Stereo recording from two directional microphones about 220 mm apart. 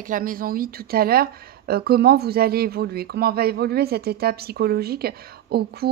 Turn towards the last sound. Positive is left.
turn(degrees=-45)  # may be behind; listen again after turning